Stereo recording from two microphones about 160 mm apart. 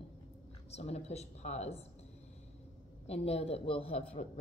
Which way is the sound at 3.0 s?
40° left (ahead or behind).